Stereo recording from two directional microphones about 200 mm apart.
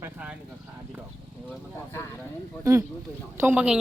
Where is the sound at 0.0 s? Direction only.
5° right (ahead or behind).